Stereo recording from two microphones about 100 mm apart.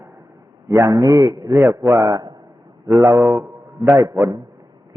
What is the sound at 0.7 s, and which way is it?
A man's voice, 30° right (ahead or behind).